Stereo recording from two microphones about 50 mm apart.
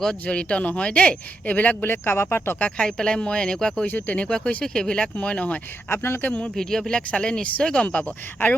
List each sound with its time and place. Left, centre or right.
0.3 s speech: left
1.8 s speech: left
2.6 s speech: left
3.8 s speech: left
4.3 s speech: centre
5.9 s speech: left
6.2 s speech: left
6.6 s speech: centre
7.9 s speech: left